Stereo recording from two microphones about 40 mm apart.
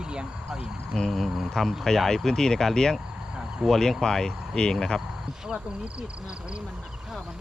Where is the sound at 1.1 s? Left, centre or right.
Centre.